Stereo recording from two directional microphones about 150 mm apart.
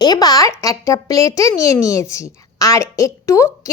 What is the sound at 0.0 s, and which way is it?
Speech, 25° left (ahead or behind).